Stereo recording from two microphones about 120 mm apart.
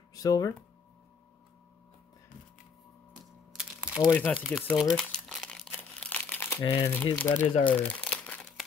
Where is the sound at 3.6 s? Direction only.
10° right (ahead or behind).